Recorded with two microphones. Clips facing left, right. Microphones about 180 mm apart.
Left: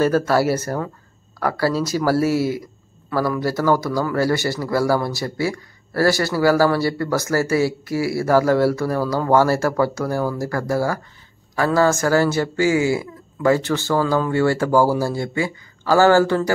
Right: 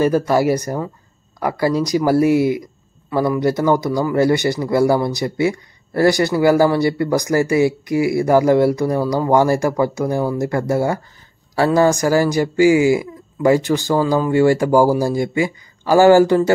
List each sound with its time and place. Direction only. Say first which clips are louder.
0.0 s speech: right 2 dB; 15° right (ahead or behind)